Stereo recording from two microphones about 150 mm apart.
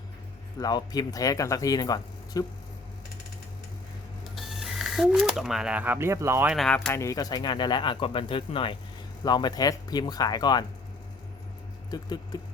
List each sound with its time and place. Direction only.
0.6 s speech: 25° left (ahead or behind)
4.4 s speech: centre (ahead or behind); by 6.5 s 15° right (ahead or behind)
6.5 s speech: centre (ahead or behind)
6.7 s speech: 15° left (ahead or behind)
11.9 s speech: 25° left (ahead or behind)